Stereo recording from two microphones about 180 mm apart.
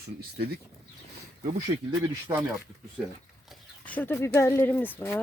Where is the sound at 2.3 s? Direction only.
25° right (ahead or behind).